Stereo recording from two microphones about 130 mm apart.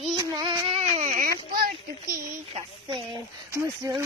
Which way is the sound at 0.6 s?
50° right (ahead or behind).